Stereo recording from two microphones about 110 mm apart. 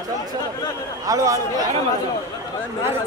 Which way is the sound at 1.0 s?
30° right (ahead or behind).